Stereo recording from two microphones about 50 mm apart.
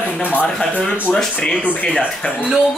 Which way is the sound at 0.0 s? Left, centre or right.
Left.